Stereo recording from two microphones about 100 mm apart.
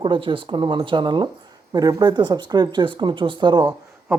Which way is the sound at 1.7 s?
40° right (ahead or behind).